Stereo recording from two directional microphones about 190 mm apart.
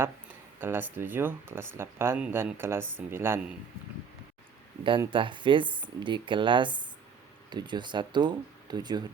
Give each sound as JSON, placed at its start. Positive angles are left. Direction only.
{"t": 0.6, "sound": "speech", "side_deg": -10}
{"t": 4.8, "sound": "speech", "side_deg": -25}